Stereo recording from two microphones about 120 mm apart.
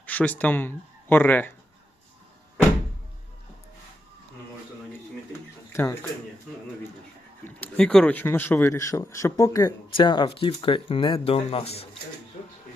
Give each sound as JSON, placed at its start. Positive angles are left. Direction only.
{"t": 0.0, "sound": "speech", "side_deg": 15}
{"t": 5.7, "sound": "speech", "side_deg": 20}
{"t": 7.4, "sound": "speech", "side_deg": 10}
{"t": 9.9, "sound": "speech", "side_deg": 40}